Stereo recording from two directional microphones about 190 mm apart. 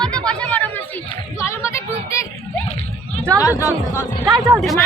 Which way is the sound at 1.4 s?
15° left (ahead or behind).